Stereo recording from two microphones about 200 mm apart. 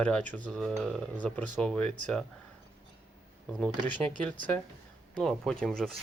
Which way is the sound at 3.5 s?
5° left (ahead or behind).